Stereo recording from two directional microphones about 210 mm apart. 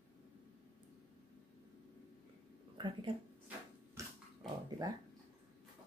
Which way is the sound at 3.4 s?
5° right (ahead or behind).